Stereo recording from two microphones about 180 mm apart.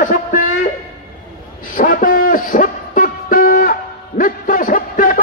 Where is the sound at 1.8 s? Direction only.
50° left (ahead or behind).